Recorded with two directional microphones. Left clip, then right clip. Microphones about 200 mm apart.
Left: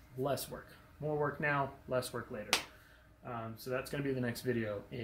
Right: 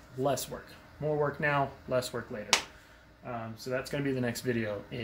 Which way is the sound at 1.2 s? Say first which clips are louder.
Right 5 dB; 5° right (ahead or behind).